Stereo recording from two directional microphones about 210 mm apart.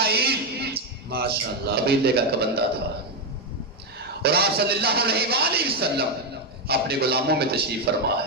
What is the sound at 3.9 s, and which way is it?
Speech, 50° right (ahead or behind).